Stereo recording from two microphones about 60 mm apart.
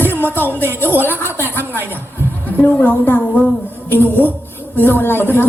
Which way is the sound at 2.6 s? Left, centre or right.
Left.